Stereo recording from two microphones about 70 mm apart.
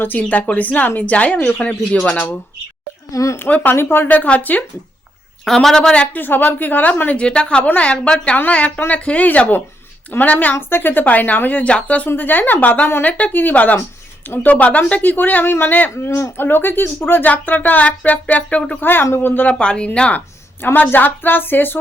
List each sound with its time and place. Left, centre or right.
0.2 s speech: left
3.1 s speech: left
3.3 s speech: left
5.5 s a woman's voice: centre
6.1 s speech: left
7.2 s a woman's voice: centre; by 19.5 s left
19.5 s speech: centre; by 21.8 s left